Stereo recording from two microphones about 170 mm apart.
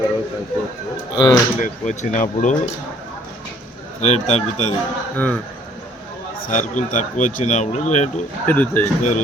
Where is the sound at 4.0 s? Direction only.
40° left (ahead or behind).